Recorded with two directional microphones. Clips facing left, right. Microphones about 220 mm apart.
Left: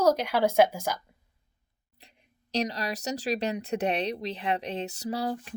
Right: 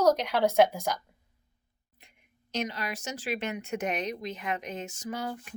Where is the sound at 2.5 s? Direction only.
35° left (ahead or behind).